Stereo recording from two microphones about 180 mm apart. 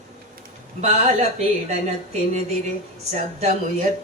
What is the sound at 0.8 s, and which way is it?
Speech, 40° right (ahead or behind).